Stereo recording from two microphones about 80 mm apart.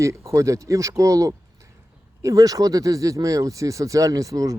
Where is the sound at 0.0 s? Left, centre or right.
Right.